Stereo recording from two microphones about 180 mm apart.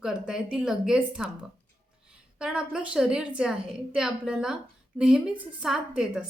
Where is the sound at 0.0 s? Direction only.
5° right (ahead or behind).